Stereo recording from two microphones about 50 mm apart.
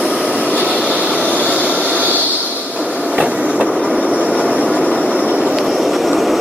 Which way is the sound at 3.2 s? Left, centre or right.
Right.